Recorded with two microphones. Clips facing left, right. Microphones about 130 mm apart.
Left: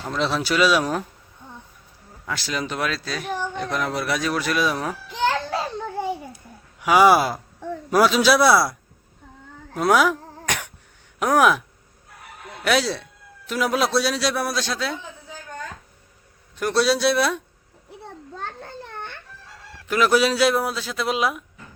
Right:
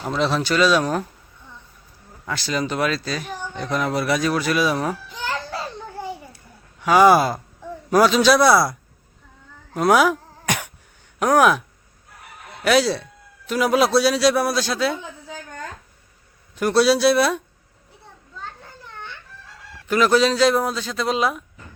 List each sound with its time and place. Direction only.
0.1 s a man's voice: centre (ahead or behind)
2.2 s a man's voice: centre (ahead or behind)
5.1 s children playing: 75° left (ahead or behind)
6.8 s a man's voice: 5° left (ahead or behind)
9.7 s throat clearing: centre (ahead or behind)
11.2 s a man's voice: centre (ahead or behind)
12.6 s a man's voice: centre (ahead or behind)
16.6 s a man's voice: centre (ahead or behind)
18.0 s children playing: 65° left (ahead or behind)
19.9 s a man's voice: 5° left (ahead or behind)